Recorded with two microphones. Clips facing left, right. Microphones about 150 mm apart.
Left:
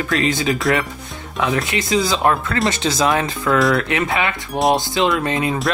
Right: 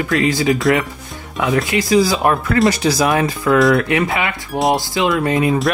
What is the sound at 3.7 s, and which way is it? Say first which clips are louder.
Speech: right 3 dB; 20° right (ahead or behind).